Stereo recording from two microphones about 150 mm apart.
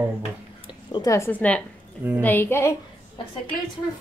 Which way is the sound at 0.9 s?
25° left (ahead or behind).